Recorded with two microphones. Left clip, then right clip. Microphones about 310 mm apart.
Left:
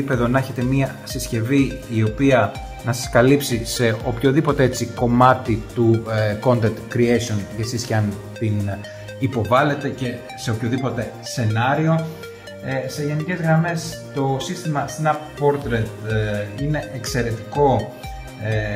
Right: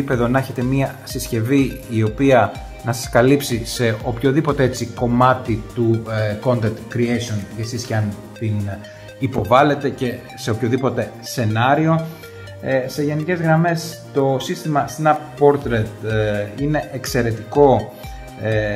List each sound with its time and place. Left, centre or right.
0.1 s speech: centre
9.2 s speech: centre
13.0 s speech: right